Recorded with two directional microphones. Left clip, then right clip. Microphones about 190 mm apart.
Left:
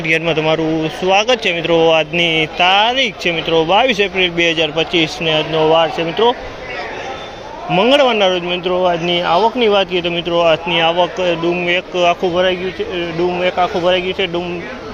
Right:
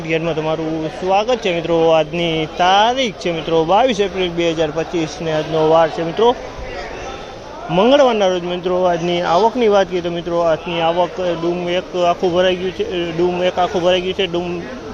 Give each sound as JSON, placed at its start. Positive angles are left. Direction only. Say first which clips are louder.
{"t": 0.1, "sound": "speech", "louder": "left 4 dB", "side_deg": 5}
{"t": 7.7, "sound": "speech", "louder": "even", "side_deg": -10}
{"t": 12.2, "sound": "speech", "louder": "even", "side_deg": -20}